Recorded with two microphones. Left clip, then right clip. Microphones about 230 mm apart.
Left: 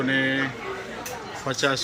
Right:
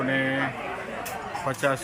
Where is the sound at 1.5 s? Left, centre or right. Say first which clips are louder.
Left 2 dB; centre.